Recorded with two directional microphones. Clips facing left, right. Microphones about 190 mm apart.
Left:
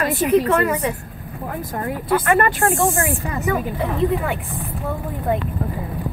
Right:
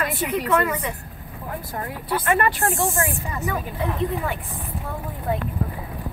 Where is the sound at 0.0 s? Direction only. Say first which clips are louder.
Left 8 dB; 40° left (ahead or behind).